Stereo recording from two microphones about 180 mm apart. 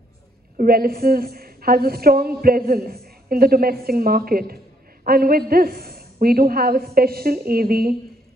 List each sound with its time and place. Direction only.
0.6 s a woman's voice: 55° right (ahead or behind)